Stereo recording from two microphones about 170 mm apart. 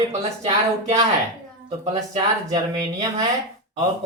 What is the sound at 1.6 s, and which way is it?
Speech, 45° right (ahead or behind).